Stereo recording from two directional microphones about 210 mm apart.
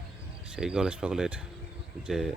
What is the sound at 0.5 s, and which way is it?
Speech, 5° right (ahead or behind).